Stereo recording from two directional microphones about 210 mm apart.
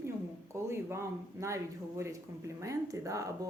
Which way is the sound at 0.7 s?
15° right (ahead or behind).